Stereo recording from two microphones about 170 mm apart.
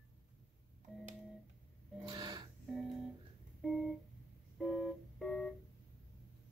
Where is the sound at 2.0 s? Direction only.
25° right (ahead or behind).